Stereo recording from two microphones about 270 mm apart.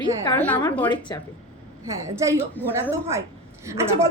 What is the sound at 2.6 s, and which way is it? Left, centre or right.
Speech, centre.